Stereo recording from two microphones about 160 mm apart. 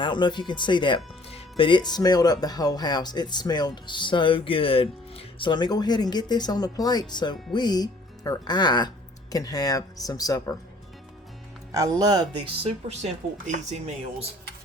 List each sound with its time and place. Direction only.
0.0 s speech: 30° left (ahead or behind)
11.7 s speech: 25° right (ahead or behind)
12.6 s a woman's voice: 40° right (ahead or behind)